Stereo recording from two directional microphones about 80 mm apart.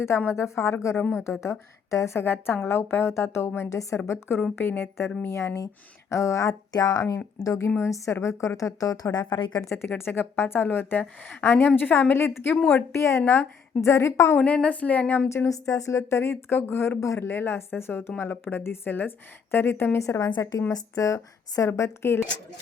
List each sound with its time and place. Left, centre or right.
0.3 s speech: left
2.2 s a woman's voice: left
7.8 s a woman's voice: left
9.6 s a woman's voice: left
13.2 s a woman's voice: left
13.8 s speech: left
14.3 s a woman's voice: centre
15.4 s a woman's voice: left
20.0 s a woman's voice: left